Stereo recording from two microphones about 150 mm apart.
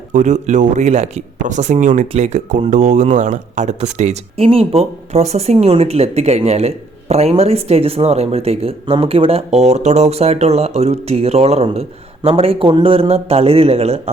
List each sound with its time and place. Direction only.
0.1 s a man's voice: 55° right (ahead or behind)